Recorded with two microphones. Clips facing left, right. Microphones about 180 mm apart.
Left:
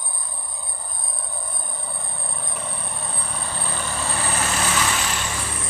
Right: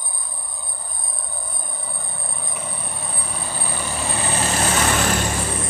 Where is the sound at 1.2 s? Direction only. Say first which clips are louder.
Even; centre (ahead or behind); by 4.7 s 25° right (ahead or behind).